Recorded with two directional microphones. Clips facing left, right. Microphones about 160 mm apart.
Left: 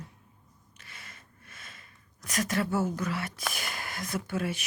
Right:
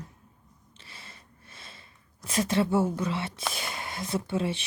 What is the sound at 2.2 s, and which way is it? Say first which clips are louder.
Speech: right 4 dB; 25° right (ahead or behind).